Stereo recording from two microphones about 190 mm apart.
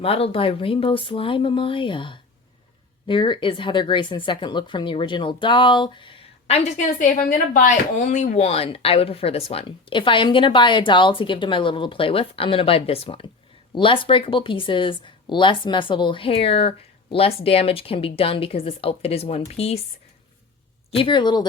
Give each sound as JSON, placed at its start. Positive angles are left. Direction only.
{"t": 0.0, "sound": "speech", "side_deg": 30}
{"t": 20.9, "sound": "speech", "side_deg": 25}